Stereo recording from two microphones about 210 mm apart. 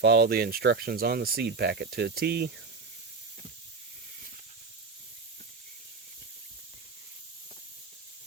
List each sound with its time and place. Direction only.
0.0 s speech: 45° right (ahead or behind)